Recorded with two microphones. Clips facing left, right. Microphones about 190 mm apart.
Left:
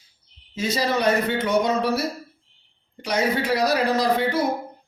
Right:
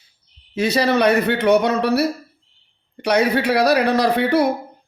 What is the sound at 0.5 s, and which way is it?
A man's voice, 65° right (ahead or behind).